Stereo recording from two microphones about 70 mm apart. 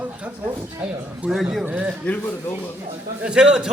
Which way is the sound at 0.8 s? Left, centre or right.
Centre.